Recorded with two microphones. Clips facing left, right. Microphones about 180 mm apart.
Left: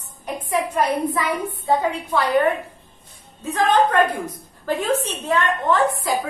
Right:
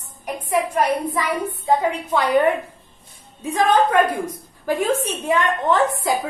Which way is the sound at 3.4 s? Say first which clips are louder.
Right 1 dB; 10° right (ahead or behind).